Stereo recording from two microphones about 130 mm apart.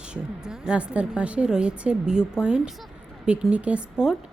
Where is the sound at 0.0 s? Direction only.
5° right (ahead or behind).